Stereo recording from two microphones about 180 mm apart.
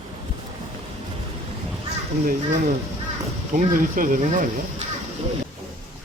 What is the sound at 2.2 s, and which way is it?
Speech, 50° right (ahead or behind).